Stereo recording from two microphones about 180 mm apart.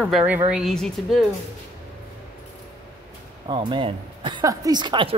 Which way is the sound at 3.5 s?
25° right (ahead or behind).